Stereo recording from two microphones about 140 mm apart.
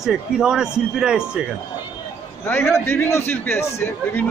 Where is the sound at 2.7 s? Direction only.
20° left (ahead or behind).